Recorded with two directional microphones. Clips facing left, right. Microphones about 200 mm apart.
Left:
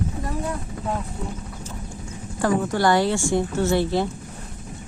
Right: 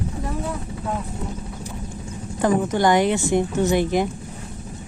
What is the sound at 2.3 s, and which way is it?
A woman's voice, 20° right (ahead or behind).